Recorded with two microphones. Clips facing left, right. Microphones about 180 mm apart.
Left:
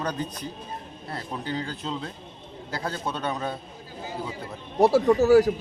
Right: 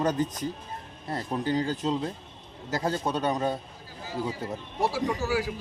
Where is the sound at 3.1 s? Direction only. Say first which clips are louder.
Right 2 dB; 40° right (ahead or behind).